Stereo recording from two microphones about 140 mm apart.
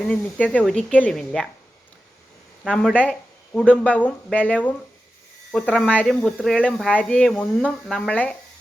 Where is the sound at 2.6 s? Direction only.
5° left (ahead or behind).